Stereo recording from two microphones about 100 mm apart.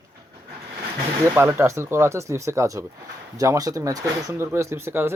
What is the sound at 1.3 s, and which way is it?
Speech, 25° right (ahead or behind).